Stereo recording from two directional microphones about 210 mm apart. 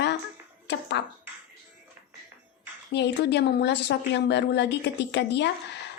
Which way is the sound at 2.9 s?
55° left (ahead or behind).